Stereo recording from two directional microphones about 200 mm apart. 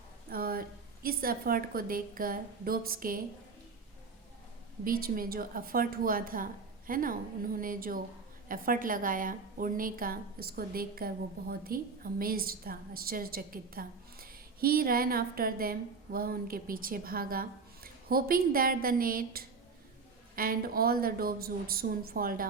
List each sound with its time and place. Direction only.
0.3 s a sound: 50° right (ahead or behind)
1.0 s a woman's voice: 45° right (ahead or behind)
4.9 s a woman's voice: 45° right (ahead or behind)